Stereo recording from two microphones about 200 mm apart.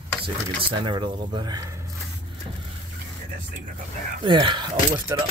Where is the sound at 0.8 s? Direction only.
25° right (ahead or behind).